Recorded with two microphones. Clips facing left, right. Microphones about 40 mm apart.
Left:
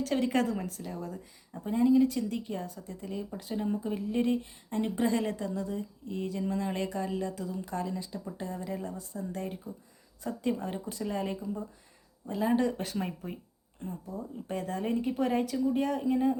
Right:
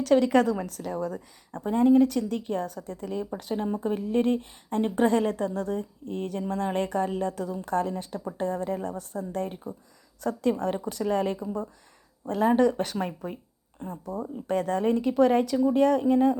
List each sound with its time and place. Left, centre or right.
0.1 s a woman's voice: right
0.6 s speech: right
1.1 s a woman's voice: right
10.2 s speech: right
12.5 s a woman's voice: right
13.9 s speech: right